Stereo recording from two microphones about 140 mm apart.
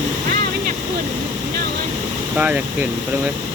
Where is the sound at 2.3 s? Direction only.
10° right (ahead or behind).